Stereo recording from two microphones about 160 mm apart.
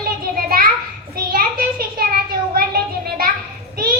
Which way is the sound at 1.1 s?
70° right (ahead or behind).